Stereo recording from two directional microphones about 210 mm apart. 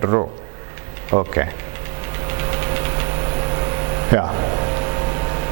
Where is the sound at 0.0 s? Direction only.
20° right (ahead or behind).